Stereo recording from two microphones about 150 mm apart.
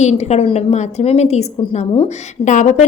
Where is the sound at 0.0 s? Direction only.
50° left (ahead or behind).